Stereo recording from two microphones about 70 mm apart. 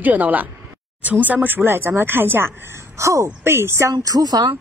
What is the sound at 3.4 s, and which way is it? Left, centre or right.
A woman's voice, right.